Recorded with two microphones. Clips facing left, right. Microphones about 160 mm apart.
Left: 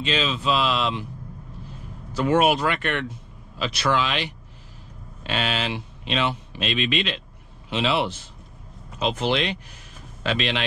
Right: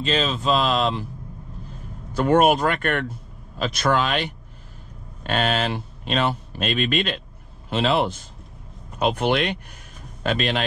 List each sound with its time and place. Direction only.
0.0 s a man's voice: 40° right (ahead or behind)
8.9 s speech: 55° right (ahead or behind)